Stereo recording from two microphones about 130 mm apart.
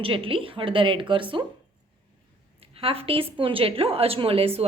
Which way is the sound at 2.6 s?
45° right (ahead or behind).